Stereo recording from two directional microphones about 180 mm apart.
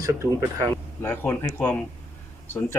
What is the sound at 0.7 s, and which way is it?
Speech, 15° left (ahead or behind).